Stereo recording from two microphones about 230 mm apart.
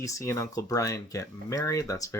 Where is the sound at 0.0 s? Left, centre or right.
Centre.